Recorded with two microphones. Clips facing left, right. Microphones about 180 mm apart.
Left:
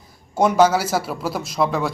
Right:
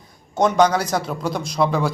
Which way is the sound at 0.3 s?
5° left (ahead or behind).